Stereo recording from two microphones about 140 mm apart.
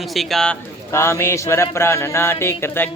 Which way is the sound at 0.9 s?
20° left (ahead or behind).